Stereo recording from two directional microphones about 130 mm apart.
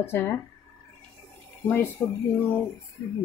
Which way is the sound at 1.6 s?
15° left (ahead or behind).